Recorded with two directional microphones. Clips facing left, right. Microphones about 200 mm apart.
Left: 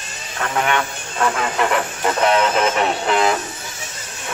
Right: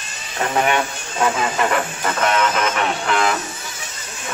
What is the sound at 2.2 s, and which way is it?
Music, 30° left (ahead or behind).